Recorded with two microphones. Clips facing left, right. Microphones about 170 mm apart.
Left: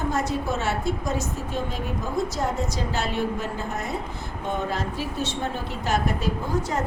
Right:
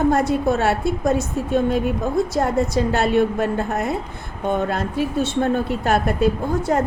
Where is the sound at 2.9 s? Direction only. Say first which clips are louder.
Right 8 dB; 60° right (ahead or behind).